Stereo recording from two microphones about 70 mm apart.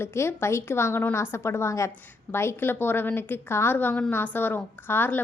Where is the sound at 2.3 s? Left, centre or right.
Left.